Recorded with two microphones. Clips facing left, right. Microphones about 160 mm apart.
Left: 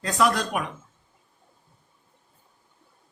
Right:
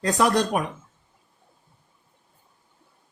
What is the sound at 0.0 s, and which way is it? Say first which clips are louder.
Speech: right 2 dB; 35° right (ahead or behind).